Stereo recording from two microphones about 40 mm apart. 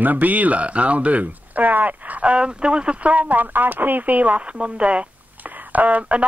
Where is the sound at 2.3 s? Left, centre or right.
Right.